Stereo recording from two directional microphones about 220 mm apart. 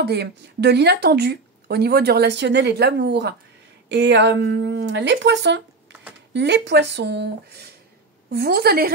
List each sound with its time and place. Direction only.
0.0 s speech: 50° right (ahead or behind)